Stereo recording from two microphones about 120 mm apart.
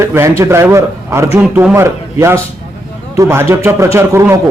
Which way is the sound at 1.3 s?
10° right (ahead or behind).